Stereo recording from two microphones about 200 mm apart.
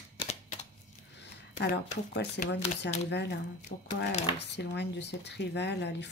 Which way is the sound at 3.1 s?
60° left (ahead or behind).